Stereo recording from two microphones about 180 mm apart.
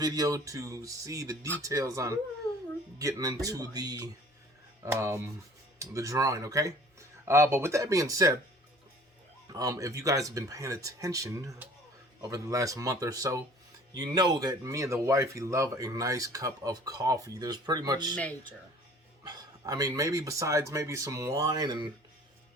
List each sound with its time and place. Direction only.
0.0 s speech: 20° right (ahead or behind)
9.5 s speech: 20° right (ahead or behind)
18.2 s speech: 10° left (ahead or behind)
19.2 s speech: 20° right (ahead or behind)